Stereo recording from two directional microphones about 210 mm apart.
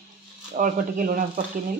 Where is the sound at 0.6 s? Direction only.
40° right (ahead or behind).